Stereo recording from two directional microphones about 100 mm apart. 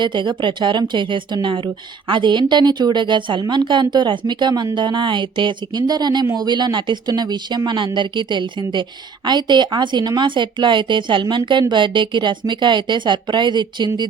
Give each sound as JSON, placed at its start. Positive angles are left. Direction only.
{"t": 0.0, "sound": "a woman's voice", "side_deg": -50}